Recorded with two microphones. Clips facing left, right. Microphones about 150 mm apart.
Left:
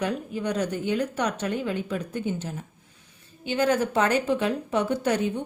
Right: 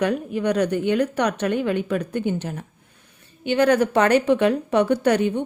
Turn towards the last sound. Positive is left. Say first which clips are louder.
# right 5 dB
turn(degrees=-65)  # may be behind; listen again after turning